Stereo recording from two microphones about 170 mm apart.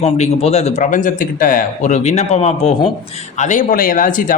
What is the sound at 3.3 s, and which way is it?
Speech, 45° left (ahead or behind).